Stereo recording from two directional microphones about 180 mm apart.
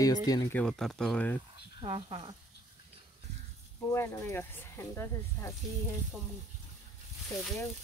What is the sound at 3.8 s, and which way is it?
Speech, 15° left (ahead or behind).